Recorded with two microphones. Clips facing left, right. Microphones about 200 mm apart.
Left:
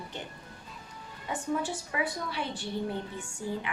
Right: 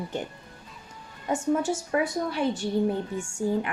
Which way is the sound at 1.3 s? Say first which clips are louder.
Right 7 dB; 45° right (ahead or behind).